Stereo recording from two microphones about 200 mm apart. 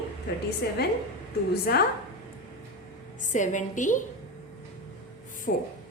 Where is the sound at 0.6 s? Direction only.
50° left (ahead or behind).